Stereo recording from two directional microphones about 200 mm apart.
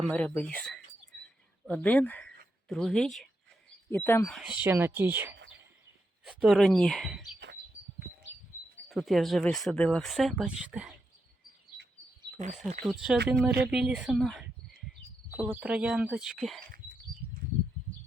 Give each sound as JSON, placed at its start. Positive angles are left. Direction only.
{"t": 0.1, "sound": "speech", "side_deg": 5}
{"t": 4.6, "sound": "speech", "side_deg": -10}
{"t": 8.9, "sound": "speech", "side_deg": 0}
{"t": 12.4, "sound": "speech", "side_deg": -35}
{"t": 12.8, "sound": "speech", "side_deg": 0}